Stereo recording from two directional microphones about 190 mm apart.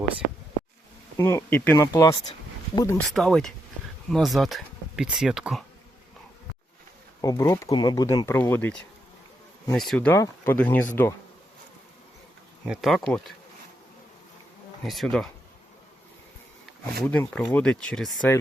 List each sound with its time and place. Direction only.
1.1 s speech: 15° left (ahead or behind)
3.1 s speech: centre (ahead or behind)
7.2 s speech: 20° left (ahead or behind)
12.6 s speech: centre (ahead or behind)
14.8 s speech: centre (ahead or behind)
17.0 s speech: 5° left (ahead or behind)